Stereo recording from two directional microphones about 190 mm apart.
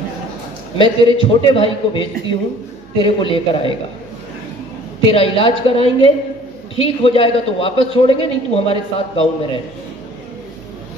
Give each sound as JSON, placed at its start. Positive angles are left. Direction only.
{"t": 0.7, "sound": "a man's voice", "side_deg": 30}
{"t": 5.0, "sound": "a man's voice", "side_deg": 30}